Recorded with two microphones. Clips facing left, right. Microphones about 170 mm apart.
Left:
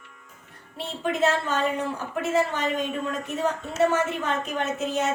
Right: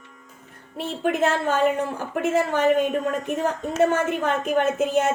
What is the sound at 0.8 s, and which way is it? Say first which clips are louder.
A woman's voice: right 3 dB; 55° right (ahead or behind).